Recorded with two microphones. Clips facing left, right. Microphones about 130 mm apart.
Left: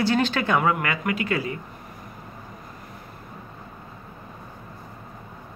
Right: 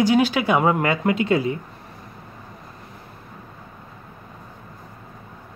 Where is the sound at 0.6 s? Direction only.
25° right (ahead or behind).